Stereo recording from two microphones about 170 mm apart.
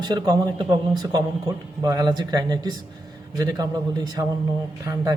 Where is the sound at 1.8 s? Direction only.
20° right (ahead or behind).